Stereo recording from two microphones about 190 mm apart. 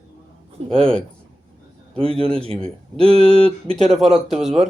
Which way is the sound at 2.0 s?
30° right (ahead or behind).